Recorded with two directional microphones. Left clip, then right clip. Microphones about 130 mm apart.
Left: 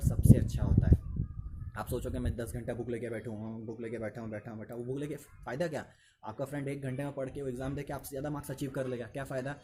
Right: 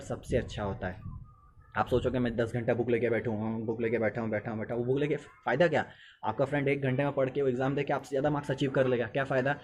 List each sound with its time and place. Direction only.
0.0 s speech: 40° left (ahead or behind)